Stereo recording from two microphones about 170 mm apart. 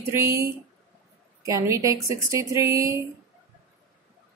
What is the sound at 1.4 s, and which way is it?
Speech, 20° right (ahead or behind).